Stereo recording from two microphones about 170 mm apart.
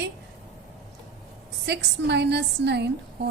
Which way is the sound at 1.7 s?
80° right.